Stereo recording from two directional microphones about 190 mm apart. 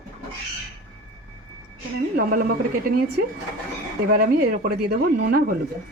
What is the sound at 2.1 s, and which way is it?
Speech, 50° right (ahead or behind).